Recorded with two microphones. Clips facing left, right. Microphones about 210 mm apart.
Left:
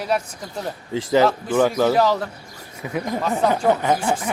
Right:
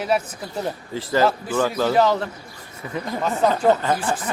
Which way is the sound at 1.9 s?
Centre (ahead or behind).